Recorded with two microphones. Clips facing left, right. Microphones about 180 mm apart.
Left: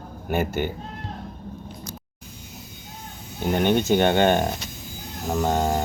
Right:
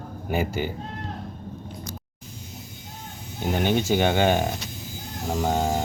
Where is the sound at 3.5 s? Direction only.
10° right (ahead or behind).